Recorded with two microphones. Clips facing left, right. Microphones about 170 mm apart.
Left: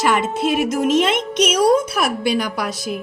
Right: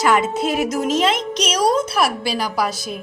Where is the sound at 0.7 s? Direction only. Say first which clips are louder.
Left 2 dB; 50° left (ahead or behind).